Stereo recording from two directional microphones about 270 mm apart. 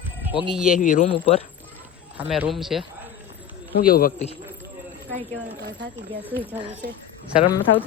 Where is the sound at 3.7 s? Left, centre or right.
Left.